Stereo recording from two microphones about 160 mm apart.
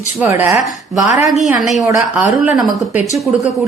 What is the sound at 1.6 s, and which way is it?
A woman's voice, centre (ahead or behind).